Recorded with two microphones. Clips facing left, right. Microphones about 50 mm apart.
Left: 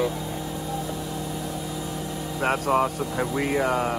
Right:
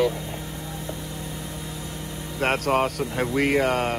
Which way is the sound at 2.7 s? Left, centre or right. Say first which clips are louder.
Even; right.